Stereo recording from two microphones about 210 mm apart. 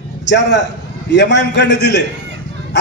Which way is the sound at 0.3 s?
55° left (ahead or behind).